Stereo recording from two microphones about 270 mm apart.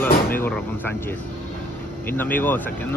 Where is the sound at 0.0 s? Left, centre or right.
Centre.